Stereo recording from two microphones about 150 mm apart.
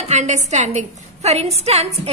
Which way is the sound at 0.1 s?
50° right (ahead or behind).